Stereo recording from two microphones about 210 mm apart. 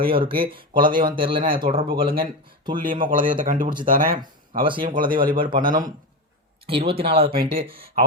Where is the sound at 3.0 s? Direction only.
40° right (ahead or behind).